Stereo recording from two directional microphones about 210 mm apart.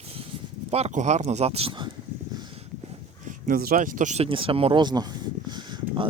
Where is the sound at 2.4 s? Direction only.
25° right (ahead or behind).